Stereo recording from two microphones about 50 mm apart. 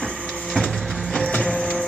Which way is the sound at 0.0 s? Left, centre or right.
Centre.